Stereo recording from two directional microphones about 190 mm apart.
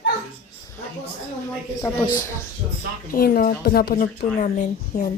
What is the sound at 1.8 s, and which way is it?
Speech, 20° left (ahead or behind).